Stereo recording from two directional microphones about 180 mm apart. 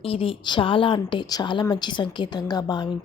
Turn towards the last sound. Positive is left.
turn(degrees=25)  # may be behind; listen again after turning